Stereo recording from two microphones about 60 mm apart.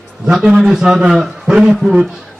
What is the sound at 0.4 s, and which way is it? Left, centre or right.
Speech, centre.